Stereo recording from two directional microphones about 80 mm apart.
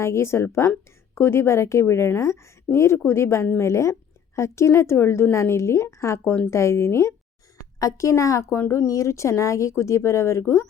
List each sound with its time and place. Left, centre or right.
0.0 s a woman's voice: left